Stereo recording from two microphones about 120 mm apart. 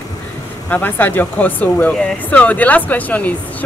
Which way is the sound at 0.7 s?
15° left (ahead or behind).